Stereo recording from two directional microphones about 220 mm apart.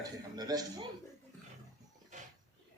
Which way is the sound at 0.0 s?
15° right (ahead or behind).